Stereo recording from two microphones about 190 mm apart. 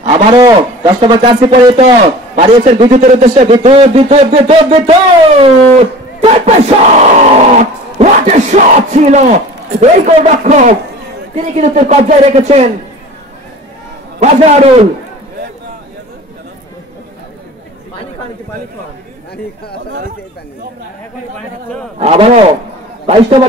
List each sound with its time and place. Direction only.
0.1 s a man's voice: 30° right (ahead or behind)
2.3 s battle cry: 35° right (ahead or behind)
14.2 s battle cry: 35° right (ahead or behind)
21.9 s battle cry: 30° right (ahead or behind)
23.0 s a man's voice: 30° right (ahead or behind)